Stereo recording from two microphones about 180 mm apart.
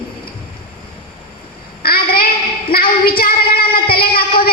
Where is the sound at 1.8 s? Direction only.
55° left (ahead or behind).